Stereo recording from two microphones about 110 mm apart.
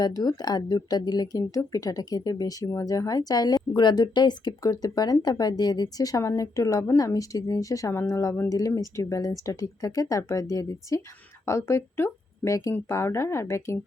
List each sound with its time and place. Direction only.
0.0 s a woman's voice: 35° left (ahead or behind)